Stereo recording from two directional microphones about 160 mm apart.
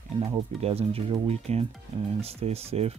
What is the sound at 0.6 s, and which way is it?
Speech, 40° right (ahead or behind).